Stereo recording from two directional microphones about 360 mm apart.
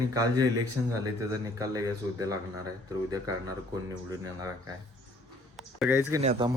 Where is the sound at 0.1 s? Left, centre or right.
Centre.